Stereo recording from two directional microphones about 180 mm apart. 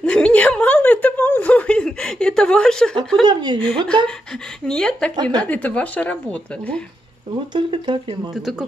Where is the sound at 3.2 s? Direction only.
25° right (ahead or behind).